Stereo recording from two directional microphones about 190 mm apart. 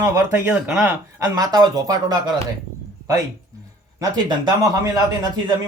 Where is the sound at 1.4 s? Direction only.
20° right (ahead or behind).